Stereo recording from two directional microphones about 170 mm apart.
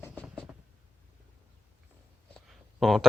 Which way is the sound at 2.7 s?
Centre (ahead or behind).